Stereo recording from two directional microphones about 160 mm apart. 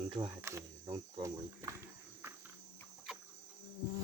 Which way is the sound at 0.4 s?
20° right (ahead or behind).